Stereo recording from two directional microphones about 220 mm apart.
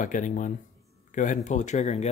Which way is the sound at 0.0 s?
35° left (ahead or behind).